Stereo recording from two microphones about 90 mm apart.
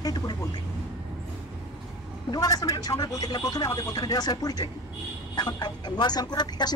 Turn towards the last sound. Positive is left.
turn(degrees=50)  # may be behind; listen again after turning